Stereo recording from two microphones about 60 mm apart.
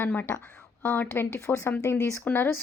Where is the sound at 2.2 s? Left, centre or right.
Left.